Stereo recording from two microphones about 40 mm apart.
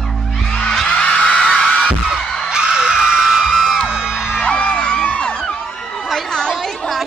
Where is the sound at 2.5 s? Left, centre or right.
Centre.